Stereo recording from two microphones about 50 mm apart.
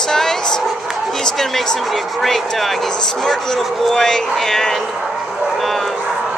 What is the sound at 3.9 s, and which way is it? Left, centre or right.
Speech, centre.